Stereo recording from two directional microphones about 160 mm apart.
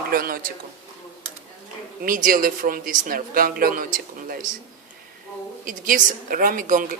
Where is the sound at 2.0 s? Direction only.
60° right (ahead or behind).